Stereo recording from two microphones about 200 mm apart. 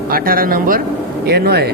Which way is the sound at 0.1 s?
45° right (ahead or behind).